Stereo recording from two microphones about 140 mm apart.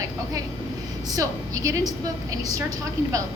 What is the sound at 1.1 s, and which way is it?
Speech, 25° right (ahead or behind).